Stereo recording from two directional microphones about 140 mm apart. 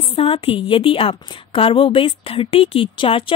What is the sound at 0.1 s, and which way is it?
A woman's voice, 40° left (ahead or behind).